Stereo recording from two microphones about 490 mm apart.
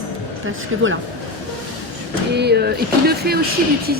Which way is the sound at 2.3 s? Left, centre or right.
Centre.